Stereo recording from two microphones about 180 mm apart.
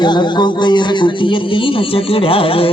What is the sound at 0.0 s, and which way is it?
A man's voice, 25° left (ahead or behind).